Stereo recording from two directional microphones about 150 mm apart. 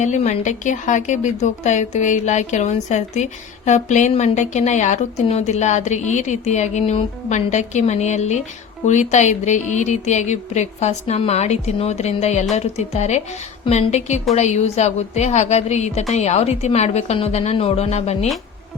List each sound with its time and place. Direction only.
0.0 s speech: 55° left (ahead or behind)